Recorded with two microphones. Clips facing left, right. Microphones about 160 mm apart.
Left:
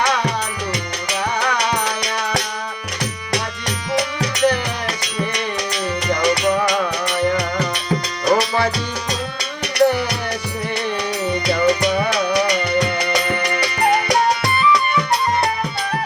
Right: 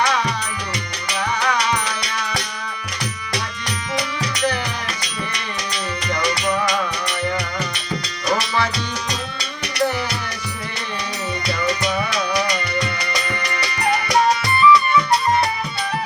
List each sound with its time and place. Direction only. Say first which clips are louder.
0.0 s music: left 1 dB; 60° left (ahead or behind)
1.4 s music: even; 60° left (ahead or behind)
3.9 s music: left 4 dB; 60° left (ahead or behind)
11.4 s music: left 5 dB; 65° left (ahead or behind)